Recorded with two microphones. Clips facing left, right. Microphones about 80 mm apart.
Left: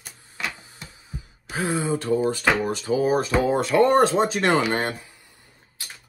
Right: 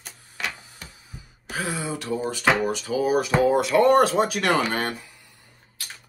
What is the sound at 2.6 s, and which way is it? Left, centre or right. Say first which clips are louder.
Speech: left 1 dB; left.